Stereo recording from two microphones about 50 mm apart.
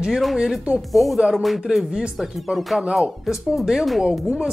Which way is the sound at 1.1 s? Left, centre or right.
Centre.